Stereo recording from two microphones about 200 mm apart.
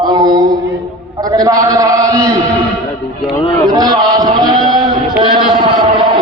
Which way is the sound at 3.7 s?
20° right (ahead or behind).